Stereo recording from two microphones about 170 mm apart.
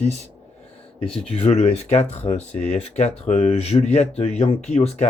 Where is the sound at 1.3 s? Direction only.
35° left (ahead or behind).